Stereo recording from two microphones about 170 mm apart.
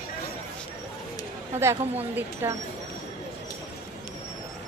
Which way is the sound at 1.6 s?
15° right (ahead or behind).